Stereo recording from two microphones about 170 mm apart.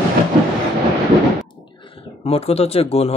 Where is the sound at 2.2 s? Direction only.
35° left (ahead or behind).